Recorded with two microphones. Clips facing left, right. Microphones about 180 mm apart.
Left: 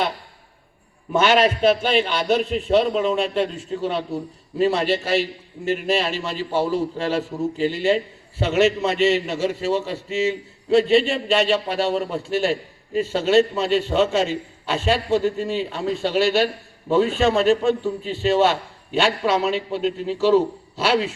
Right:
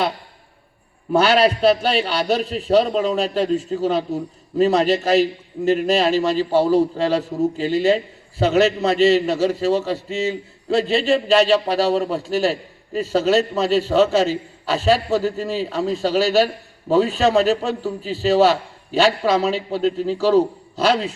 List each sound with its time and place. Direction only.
1.1 s a man's voice: 35° right (ahead or behind)